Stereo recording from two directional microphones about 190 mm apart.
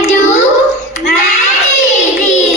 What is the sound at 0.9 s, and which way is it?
Child singing, 40° left (ahead or behind).